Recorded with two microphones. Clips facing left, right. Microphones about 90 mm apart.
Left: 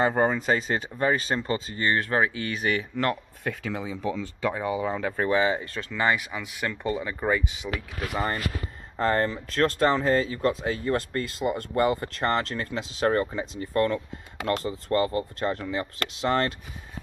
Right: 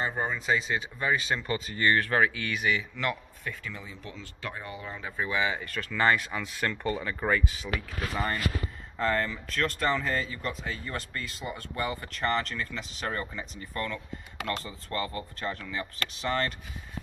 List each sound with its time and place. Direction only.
0.0 s speech: 60° left (ahead or behind); by 2.7 s 35° left (ahead or behind)
2.7 s speech: 45° left (ahead or behind)
3.4 s speech: 90° left
5.3 s speech: 35° left (ahead or behind); by 8.4 s 20° left (ahead or behind)
8.9 s speech: 40° left (ahead or behind)
14.7 s speech: 55° left (ahead or behind)